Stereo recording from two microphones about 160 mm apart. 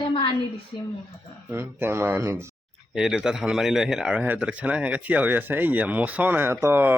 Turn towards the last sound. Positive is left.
turn(degrees=-15)  # may be behind; listen again after turning